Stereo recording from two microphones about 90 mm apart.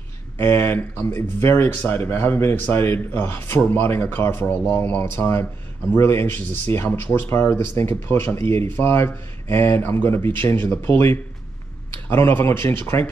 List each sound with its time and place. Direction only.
0.4 s speech: 25° left (ahead or behind)